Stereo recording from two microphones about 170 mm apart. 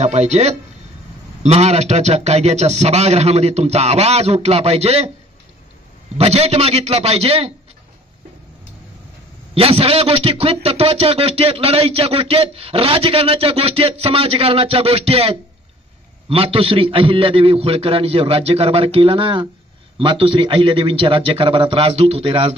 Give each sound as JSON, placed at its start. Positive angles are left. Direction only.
{"t": 0.0, "sound": "a man's voice", "side_deg": -40}
{"t": 6.1, "sound": "a man's voice", "side_deg": -35}
{"t": 9.5, "sound": "a man's voice", "side_deg": -35}